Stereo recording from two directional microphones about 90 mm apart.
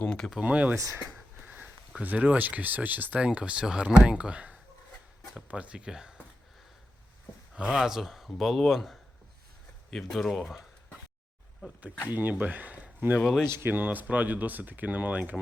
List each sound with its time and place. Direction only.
0.0 s a sound: 10° left (ahead or behind)
0.4 s speech: 15° right (ahead or behind)
0.8 s speech: 35° right (ahead or behind)
1.5 s sniff: 20° right (ahead or behind)
1.9 s speech: 15° right (ahead or behind)
7.5 s speech: 5° right (ahead or behind)
12.0 s speech: 20° right (ahead or behind)
13.2 s speech: 5° left (ahead or behind)
13.5 s speech: 25° right (ahead or behind)